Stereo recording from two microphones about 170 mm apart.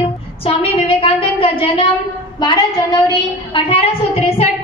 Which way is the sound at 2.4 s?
25° left (ahead or behind).